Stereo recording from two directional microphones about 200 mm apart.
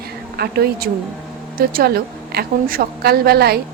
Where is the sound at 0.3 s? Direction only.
50° right (ahead or behind).